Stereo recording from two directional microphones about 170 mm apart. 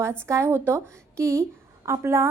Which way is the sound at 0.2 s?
15° right (ahead or behind).